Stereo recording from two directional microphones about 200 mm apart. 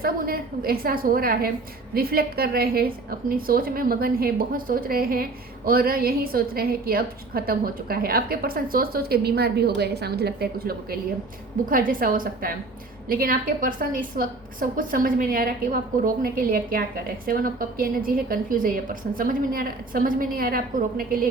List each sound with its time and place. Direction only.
0.0 s a woman's voice: 50° right (ahead or behind)